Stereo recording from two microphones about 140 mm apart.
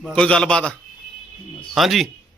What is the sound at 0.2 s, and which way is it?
A man's voice, 5° left (ahead or behind).